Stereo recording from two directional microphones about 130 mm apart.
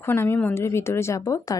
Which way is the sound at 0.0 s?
15° left (ahead or behind).